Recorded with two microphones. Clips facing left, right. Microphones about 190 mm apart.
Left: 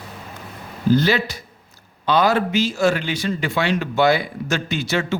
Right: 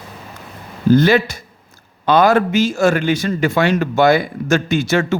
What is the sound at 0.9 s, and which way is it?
A man's voice, 50° right (ahead or behind).